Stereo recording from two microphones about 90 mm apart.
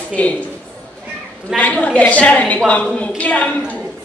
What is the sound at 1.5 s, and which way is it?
A woman's voice, 15° left (ahead or behind).